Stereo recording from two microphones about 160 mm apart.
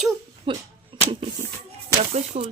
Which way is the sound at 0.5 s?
30° right (ahead or behind).